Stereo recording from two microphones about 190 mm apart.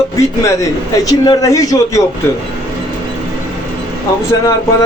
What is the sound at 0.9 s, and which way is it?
Speech, 20° left (ahead or behind).